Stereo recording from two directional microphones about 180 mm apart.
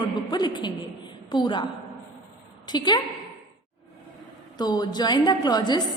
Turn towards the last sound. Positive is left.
turn(degrees=25)  # may be behind; listen again after turning